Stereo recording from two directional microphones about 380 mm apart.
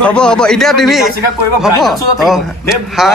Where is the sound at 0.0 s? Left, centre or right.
Centre.